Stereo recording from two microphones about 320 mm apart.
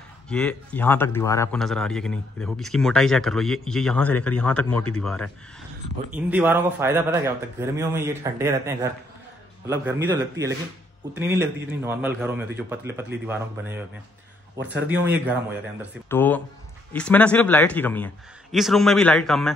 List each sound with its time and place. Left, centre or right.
0.3 s a man's voice: centre
14.6 s a man's voice: right
15.0 s speech: centre
16.1 s speech: centre